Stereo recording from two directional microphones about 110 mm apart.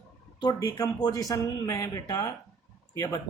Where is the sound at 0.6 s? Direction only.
35° left (ahead or behind).